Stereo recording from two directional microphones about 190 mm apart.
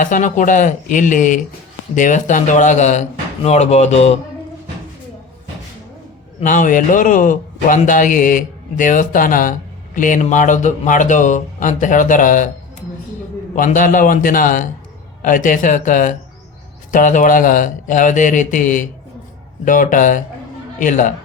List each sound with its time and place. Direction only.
0.0 s speech: 40° left (ahead or behind)
6.4 s a man's voice: 40° left (ahead or behind)
13.6 s a man's voice: 45° left (ahead or behind)